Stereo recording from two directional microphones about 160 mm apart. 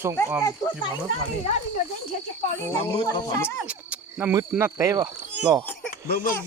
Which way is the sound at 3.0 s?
15° left (ahead or behind).